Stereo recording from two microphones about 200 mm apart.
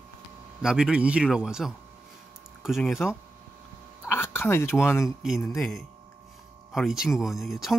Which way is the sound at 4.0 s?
10° left (ahead or behind).